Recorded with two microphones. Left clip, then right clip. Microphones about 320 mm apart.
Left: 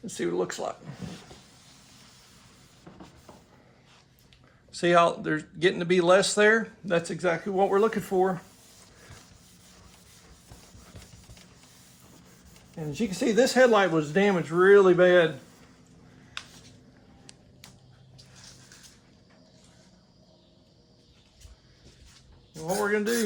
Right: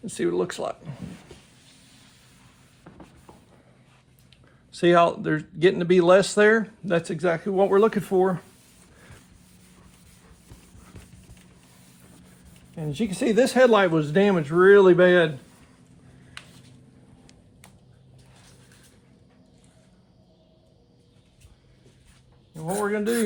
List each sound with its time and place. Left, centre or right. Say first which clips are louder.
0.0 s speech: right 4 dB; right
4.7 s speech: right 3 dB; right
12.7 s speech: right 2 dB; right
22.5 s a sound: even; right